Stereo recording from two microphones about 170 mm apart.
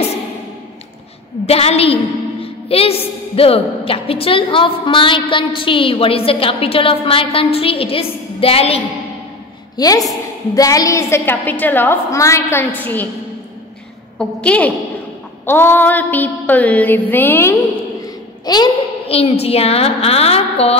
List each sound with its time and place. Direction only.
1.4 s a woman's voice: 35° left (ahead or behind)
9.8 s a woman's voice: 20° left (ahead or behind)
14.1 s a woman's voice: 5° left (ahead or behind)
18.4 s a woman's voice: 25° left (ahead or behind)